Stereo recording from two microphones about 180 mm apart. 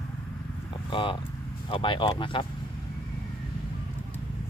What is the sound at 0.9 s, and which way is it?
Speech, 30° left (ahead or behind).